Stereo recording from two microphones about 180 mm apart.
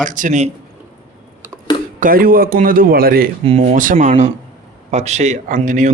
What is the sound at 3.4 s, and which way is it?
A man's voice, 35° right (ahead or behind).